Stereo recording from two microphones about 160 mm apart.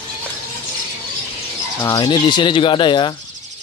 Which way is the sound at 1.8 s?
25° left (ahead or behind).